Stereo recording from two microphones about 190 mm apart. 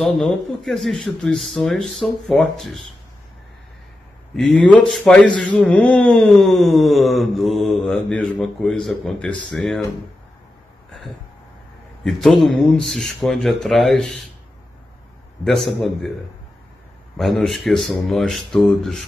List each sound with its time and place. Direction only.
0.0 s a man's voice: centre (ahead or behind)
4.4 s a man's voice: 5° left (ahead or behind)
12.0 s a man's voice: centre (ahead or behind)
15.4 s a man's voice: centre (ahead or behind)
17.2 s a man's voice: centre (ahead or behind)